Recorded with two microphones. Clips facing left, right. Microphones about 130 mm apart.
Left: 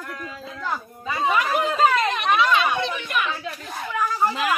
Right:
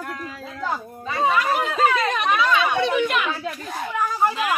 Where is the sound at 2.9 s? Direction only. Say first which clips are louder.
Right 5 dB; 85° right.